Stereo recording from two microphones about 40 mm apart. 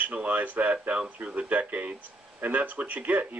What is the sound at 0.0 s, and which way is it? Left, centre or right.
Speech, right.